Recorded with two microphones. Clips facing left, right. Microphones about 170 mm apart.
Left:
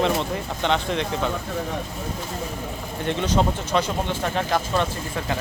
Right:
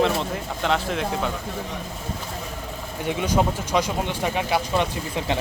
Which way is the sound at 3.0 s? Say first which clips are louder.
Even; 10° right (ahead or behind).